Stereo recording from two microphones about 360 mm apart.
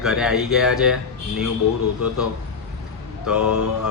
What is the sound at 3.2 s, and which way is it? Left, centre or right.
Speech, centre.